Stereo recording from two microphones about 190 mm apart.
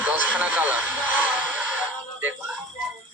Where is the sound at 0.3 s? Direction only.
10° right (ahead or behind).